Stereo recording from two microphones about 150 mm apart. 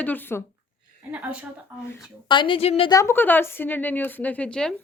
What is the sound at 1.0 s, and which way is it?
Speech, 10° right (ahead or behind).